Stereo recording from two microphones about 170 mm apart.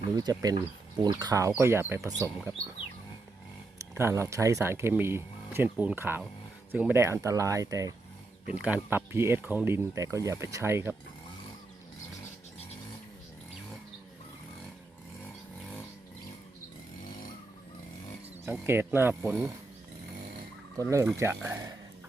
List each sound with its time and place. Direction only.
0.2 s speech: 25° right (ahead or behind)
3.8 s speech: 15° right (ahead or behind)
8.4 s speech: 10° right (ahead or behind)
18.4 s speech: 10° right (ahead or behind)
20.7 s speech: 15° right (ahead or behind)